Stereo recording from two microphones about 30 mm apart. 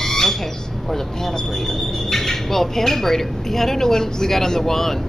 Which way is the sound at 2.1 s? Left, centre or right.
Centre.